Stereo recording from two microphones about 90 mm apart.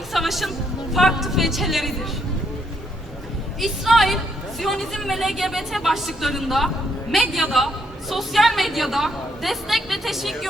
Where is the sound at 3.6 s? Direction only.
Centre (ahead or behind).